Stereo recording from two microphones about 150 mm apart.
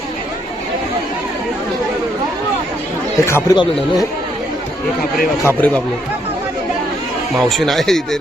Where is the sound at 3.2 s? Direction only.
20° left (ahead or behind).